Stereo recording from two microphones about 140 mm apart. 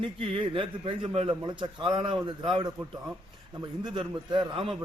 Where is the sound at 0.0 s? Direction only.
40° right (ahead or behind).